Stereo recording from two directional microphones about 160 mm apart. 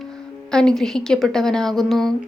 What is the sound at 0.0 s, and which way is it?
A woman's voice, 5° left (ahead or behind).